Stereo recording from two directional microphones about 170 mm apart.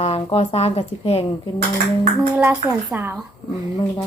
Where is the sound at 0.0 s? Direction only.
35° left (ahead or behind).